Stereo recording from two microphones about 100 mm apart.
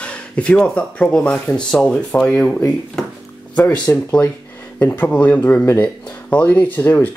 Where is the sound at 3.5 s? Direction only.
20° left (ahead or behind).